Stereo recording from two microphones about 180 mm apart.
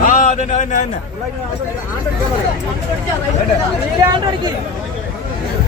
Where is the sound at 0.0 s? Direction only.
45° left (ahead or behind).